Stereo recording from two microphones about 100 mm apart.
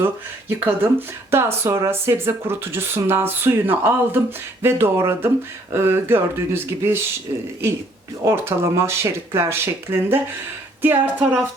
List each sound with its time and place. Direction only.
0.0 s speech: 20° right (ahead or behind)
8.2 s speech: 30° right (ahead or behind)